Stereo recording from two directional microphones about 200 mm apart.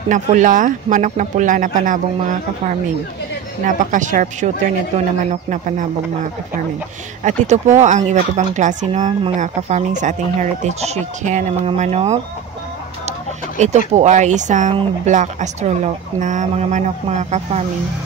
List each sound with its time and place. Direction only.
0.1 s speech: 40° right (ahead or behind)
3.6 s speech: 40° right (ahead or behind)
7.2 s speech: 35° right (ahead or behind)
13.6 s speech: 35° right (ahead or behind)